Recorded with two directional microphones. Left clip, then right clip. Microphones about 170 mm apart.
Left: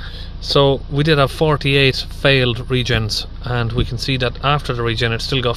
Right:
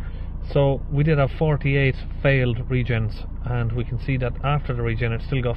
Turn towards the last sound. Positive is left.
turn(degrees=50)  # may be behind; listen again after turning